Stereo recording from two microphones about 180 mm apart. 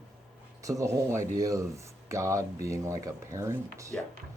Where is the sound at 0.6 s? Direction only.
20° right (ahead or behind).